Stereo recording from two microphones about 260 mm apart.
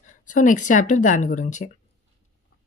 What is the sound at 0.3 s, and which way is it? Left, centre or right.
Speech, left.